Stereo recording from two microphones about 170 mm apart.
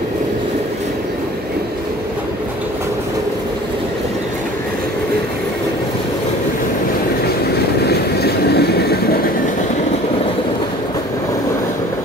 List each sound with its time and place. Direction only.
7.9 s train: 70° left (ahead or behind)